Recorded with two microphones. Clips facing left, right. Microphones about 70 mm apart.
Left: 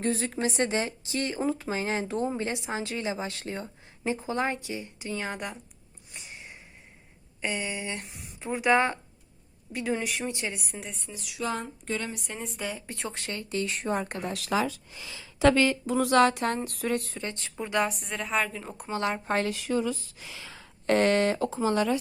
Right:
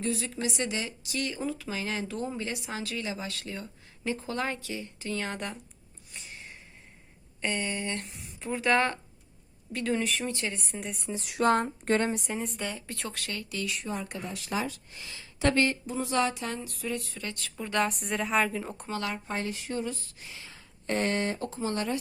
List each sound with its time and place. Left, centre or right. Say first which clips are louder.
0.0 s speech: left 3 dB; left; by 5.5 s centre
6.1 s a sound: left 1 dB; centre
7.4 s a woman's voice: even; centre
11.1 s speech: right 7 dB; right
11.3 s a sound: right 7 dB; right
12.3 s a woman's voice: right 1 dB; centre
12.9 s speech: left 1 dB; left
15.9 s a sound: left 7 dB; left
17.2 s speech: left 3 dB; left
17.7 s a woman's voice: even; centre
18.9 s speech: left 6 dB; left
19.2 s speech: left 6 dB; left
20.5 s a sound: left 7 dB; left